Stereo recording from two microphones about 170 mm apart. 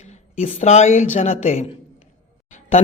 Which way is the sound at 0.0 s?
40° left (ahead or behind).